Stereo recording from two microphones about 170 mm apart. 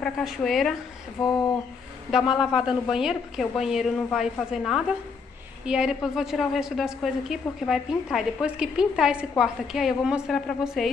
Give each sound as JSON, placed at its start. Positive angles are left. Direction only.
{"t": 0.0, "sound": "a woman's voice", "side_deg": 0}
{"t": 1.2, "sound": "a sound", "side_deg": 20}
{"t": 2.3, "sound": "a woman's voice", "side_deg": -5}